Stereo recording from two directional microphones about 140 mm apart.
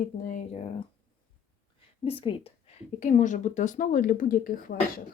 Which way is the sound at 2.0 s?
40° left (ahead or behind).